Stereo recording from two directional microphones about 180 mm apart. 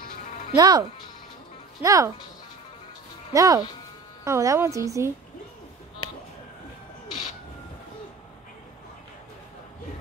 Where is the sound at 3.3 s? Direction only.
20° right (ahead or behind).